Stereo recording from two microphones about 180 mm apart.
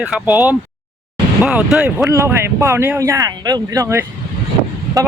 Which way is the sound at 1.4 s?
5° right (ahead or behind).